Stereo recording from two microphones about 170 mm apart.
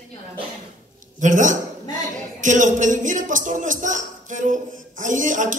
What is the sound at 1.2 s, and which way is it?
Speech, 50° right (ahead or behind).